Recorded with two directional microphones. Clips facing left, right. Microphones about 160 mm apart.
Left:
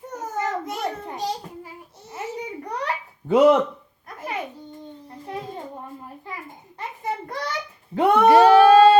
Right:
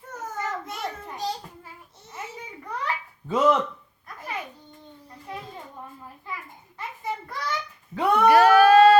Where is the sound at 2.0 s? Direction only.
35° left (ahead or behind).